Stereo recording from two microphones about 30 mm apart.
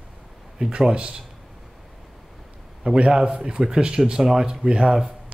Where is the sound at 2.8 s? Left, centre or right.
Right.